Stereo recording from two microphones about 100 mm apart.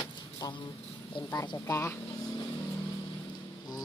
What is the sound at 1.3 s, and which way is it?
Speech, 45° left (ahead or behind).